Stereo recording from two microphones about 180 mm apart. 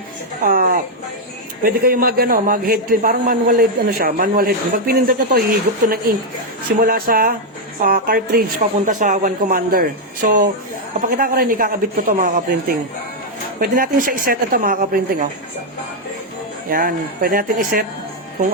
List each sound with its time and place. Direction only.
0.4 s a sound: 50° right (ahead or behind)
1.6 s a man's voice: 55° right (ahead or behind)
16.6 s speech: 55° right (ahead or behind)